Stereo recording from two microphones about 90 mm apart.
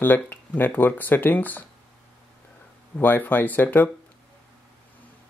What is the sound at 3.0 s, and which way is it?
Speech, 20° left (ahead or behind).